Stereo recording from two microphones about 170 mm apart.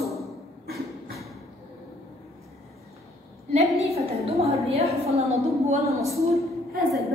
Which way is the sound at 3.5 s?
40° right (ahead or behind).